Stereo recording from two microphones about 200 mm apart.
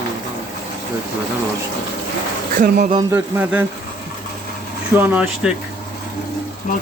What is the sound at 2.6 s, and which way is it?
Speech, 45° right (ahead or behind).